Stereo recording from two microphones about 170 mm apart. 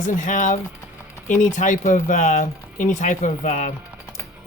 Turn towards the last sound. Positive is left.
turn(degrees=45)  # may be behind; listen again after turning